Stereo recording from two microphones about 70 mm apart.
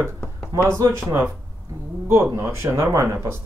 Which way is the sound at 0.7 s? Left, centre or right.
Right.